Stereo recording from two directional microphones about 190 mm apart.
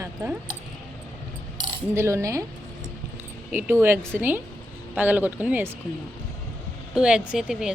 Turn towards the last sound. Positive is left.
turn(degrees=-5)  # may be behind; listen again after turning